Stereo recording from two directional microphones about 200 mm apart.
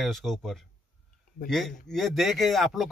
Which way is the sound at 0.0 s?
Centre (ahead or behind).